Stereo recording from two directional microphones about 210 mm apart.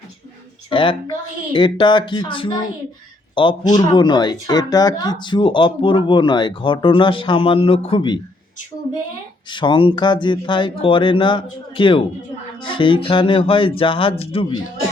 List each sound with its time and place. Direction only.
0.7 s speech: 25° left (ahead or behind)
9.5 s speech: 20° left (ahead or behind)